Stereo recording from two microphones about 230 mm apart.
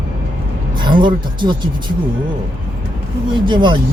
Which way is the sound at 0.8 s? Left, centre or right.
Centre.